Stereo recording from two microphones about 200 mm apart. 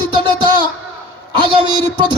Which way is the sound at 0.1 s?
25° right (ahead or behind).